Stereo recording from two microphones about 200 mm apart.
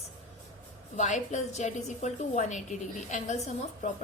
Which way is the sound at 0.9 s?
35° left (ahead or behind).